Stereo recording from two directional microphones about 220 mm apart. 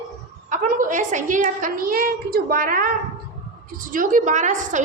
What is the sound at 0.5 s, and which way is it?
A woman's voice, 35° right (ahead or behind).